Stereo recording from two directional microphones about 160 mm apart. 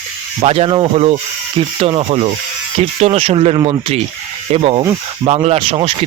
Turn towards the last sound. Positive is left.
turn(degrees=-35)  # may be behind; listen again after turning